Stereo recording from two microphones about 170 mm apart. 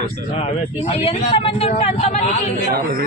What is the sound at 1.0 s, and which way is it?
Speech, 35° left (ahead or behind).